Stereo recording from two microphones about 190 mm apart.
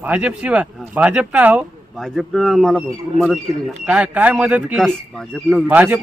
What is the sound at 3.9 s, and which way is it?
A man's voice, 5° right (ahead or behind).